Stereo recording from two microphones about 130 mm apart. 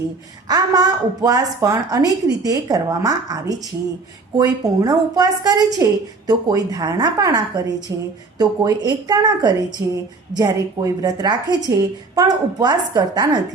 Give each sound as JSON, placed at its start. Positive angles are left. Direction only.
{"t": 0.4, "sound": "a woman's voice", "side_deg": -30}